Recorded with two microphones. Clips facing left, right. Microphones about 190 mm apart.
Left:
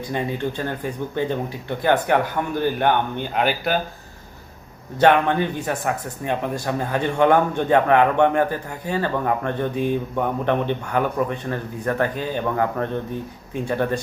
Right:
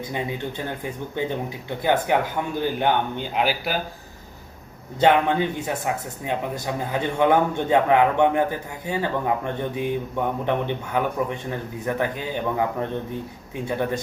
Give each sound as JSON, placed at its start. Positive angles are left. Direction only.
{"t": 0.1, "sound": "speech", "side_deg": -15}
{"t": 5.3, "sound": "speech", "side_deg": -15}